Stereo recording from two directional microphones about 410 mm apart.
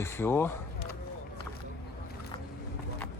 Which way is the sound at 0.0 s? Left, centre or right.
Centre.